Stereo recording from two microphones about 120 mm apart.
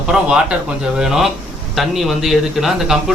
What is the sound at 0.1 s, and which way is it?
A man's voice, 5° right (ahead or behind).